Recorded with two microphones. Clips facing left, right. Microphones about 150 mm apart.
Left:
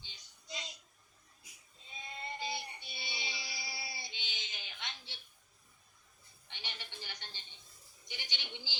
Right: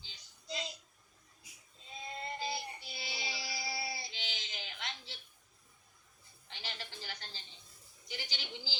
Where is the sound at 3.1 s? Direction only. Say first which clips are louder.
Right 4 dB; 35° right (ahead or behind).